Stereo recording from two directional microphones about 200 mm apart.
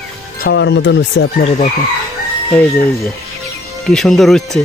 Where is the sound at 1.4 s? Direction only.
35° left (ahead or behind).